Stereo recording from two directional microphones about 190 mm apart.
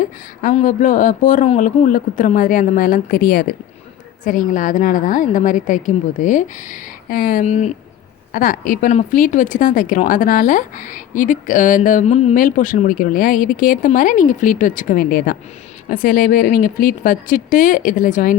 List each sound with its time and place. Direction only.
0.0 s a woman's voice: 40° left (ahead or behind)